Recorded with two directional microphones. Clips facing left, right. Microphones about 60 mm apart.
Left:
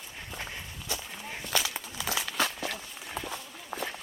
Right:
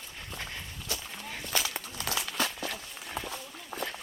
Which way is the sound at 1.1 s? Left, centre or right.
Centre.